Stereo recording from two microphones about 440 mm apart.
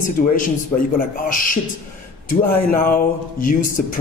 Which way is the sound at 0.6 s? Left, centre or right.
Centre.